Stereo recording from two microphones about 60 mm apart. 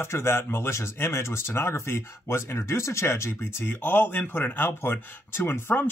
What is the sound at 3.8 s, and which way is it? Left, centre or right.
Speech, left.